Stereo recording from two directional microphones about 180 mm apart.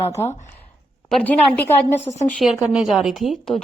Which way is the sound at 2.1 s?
30° left (ahead or behind).